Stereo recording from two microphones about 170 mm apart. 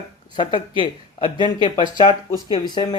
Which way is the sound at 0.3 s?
30° left (ahead or behind).